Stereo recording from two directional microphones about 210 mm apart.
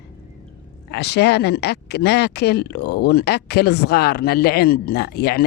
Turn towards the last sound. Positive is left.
turn(degrees=45)  # may be behind; listen again after turning